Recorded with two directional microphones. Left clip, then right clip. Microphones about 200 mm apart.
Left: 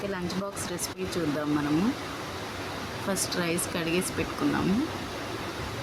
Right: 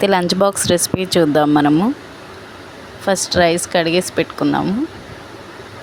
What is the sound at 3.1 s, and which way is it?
Speech, 40° right (ahead or behind).